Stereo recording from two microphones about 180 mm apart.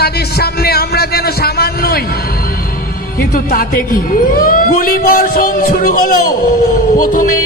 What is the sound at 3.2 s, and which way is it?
A man's voice, 55° left (ahead or behind).